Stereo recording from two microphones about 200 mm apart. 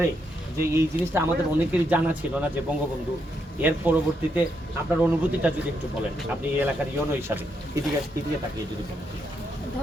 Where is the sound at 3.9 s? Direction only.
10° right (ahead or behind).